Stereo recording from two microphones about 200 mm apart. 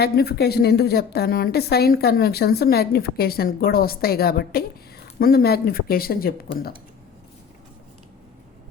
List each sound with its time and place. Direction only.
0.0 s a woman's voice: 55° left (ahead or behind)